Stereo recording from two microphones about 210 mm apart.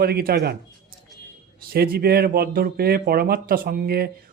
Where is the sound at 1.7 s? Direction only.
45° right (ahead or behind).